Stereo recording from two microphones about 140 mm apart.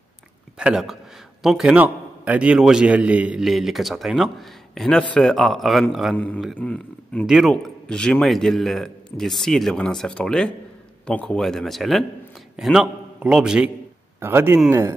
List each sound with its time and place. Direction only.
0.6 s a man's voice: 5° right (ahead or behind)
6.1 s a man's voice: 10° left (ahead or behind); by 13.7 s 5° right (ahead or behind)
14.2 s speech: 15° right (ahead or behind)